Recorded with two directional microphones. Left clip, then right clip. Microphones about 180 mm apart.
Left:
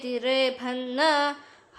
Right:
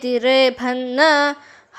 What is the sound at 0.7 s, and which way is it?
Music, 25° right (ahead or behind).